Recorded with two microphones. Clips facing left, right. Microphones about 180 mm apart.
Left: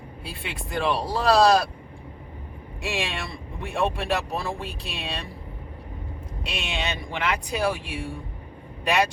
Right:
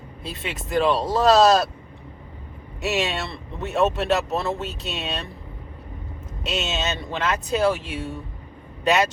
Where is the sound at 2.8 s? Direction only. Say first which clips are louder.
Right 5 dB; 10° left (ahead or behind).